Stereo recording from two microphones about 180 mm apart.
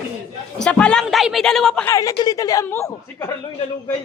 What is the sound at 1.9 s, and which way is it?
Speech, 20° left (ahead or behind).